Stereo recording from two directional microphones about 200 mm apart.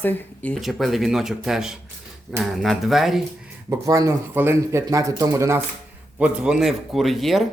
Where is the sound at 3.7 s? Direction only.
15° right (ahead or behind).